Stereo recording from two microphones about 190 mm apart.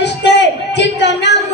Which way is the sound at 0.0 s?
65° left (ahead or behind).